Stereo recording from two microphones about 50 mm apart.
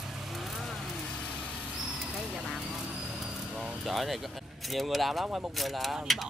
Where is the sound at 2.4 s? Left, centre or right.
Centre.